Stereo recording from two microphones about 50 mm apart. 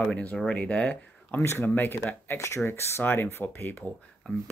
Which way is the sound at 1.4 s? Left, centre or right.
Left.